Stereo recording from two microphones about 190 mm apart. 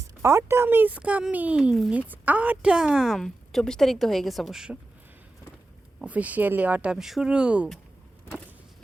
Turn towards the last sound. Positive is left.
turn(degrees=-5)  # may be behind; listen again after turning